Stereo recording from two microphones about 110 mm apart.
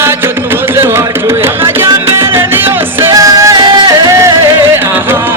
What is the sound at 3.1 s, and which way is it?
Music, 30° right (ahead or behind).